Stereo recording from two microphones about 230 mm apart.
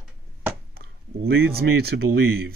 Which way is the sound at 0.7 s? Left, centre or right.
Right.